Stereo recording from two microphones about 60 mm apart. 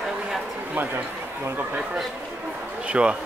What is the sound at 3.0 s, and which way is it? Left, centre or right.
Speech, centre.